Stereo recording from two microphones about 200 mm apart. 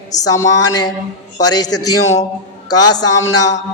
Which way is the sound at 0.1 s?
20° left (ahead or behind).